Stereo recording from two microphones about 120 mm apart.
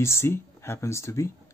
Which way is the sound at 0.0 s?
20° left (ahead or behind).